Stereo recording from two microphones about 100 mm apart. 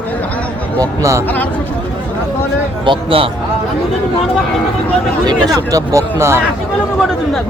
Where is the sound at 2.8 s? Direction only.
60° right (ahead or behind).